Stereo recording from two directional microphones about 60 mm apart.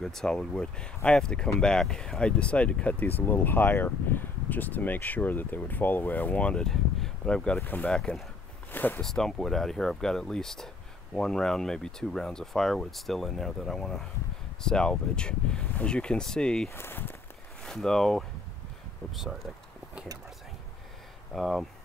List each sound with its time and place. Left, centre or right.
0.0 s speech: centre
6.6 s speech: centre
8.7 s speech: left
9.0 s speech: centre
16.7 s speech: left
17.6 s speech: centre
21.4 s speech: centre